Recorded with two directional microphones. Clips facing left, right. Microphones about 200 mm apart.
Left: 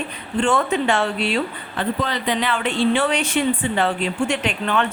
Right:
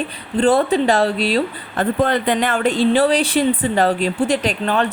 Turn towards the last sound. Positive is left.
turn(degrees=-35)  # may be behind; listen again after turning